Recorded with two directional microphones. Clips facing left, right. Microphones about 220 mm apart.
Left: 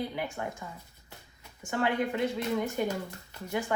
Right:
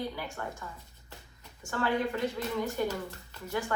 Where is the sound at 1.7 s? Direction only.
15° left (ahead or behind).